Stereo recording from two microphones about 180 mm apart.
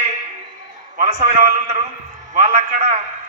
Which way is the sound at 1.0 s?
40° right (ahead or behind).